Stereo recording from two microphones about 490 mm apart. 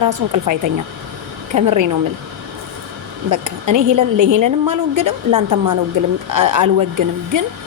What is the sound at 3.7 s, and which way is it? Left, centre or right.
A woman's voice, right.